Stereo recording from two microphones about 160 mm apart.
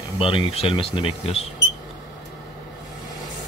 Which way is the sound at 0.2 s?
35° left (ahead or behind).